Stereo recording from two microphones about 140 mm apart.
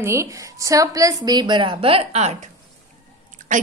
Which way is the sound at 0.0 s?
20° right (ahead or behind).